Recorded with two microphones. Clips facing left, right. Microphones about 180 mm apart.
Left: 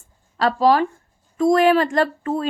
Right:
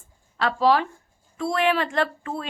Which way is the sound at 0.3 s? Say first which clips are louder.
Left 4 dB; 40° left (ahead or behind).